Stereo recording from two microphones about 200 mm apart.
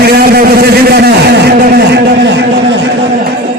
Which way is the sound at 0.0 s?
50° right (ahead or behind).